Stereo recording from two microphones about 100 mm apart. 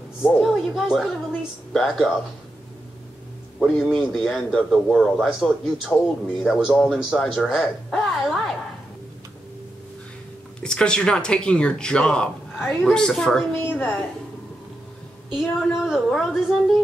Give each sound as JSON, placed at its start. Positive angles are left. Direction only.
{"t": 0.4, "sound": "a woman's voice", "side_deg": 0}
{"t": 3.5, "sound": "a woman's voice", "side_deg": 5}
{"t": 10.6, "sound": "speech", "side_deg": 10}
{"t": 15.3, "sound": "a woman's voice", "side_deg": -5}